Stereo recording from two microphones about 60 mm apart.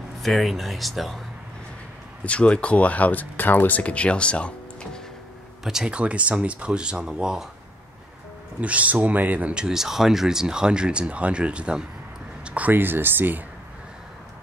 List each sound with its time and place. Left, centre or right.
0.2 s speech: centre
2.2 s speech: centre
5.6 s speech: centre
8.5 s speech: right
9.5 s speech: centre; by 13.4 s right